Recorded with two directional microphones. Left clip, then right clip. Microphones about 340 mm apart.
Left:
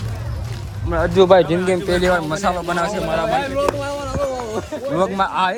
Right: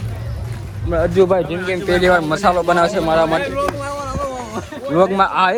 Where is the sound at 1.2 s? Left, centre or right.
Left.